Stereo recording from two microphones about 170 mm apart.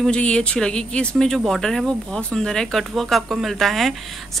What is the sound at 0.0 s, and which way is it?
Speech, 5° left (ahead or behind).